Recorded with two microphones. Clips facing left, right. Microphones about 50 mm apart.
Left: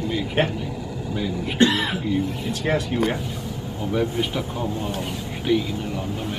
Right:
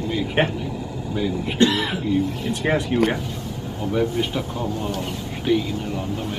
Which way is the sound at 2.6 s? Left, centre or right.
Right.